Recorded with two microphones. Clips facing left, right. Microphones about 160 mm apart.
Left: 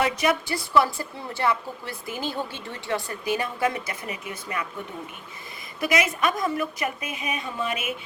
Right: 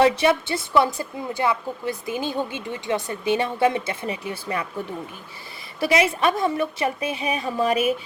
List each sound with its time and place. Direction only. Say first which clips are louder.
0.0 s a woman's voice: right 5 dB; 30° right (ahead or behind)
5.8 s a woman's voice: right 4 dB; 30° right (ahead or behind)